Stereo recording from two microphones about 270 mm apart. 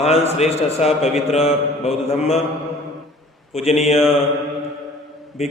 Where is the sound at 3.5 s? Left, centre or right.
Left.